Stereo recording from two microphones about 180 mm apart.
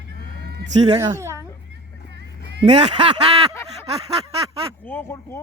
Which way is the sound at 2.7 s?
40° right (ahead or behind).